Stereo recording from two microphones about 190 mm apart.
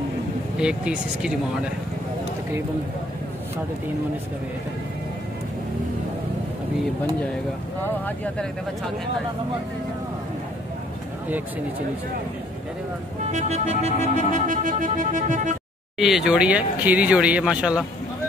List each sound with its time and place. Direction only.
0.6 s speech: 5° right (ahead or behind)
13.3 s music: 35° right (ahead or behind)
16.0 s speech: centre (ahead or behind)